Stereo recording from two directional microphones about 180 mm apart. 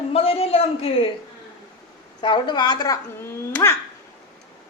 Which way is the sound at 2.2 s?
25° left (ahead or behind).